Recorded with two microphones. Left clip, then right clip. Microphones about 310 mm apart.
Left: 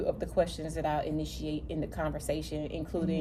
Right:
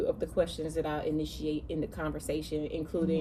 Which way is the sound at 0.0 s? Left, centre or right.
Centre.